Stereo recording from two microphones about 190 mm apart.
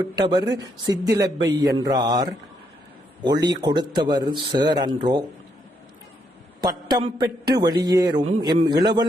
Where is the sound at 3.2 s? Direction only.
20° right (ahead or behind).